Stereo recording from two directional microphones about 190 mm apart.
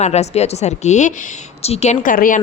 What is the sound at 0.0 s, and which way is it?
Speech, 35° left (ahead or behind).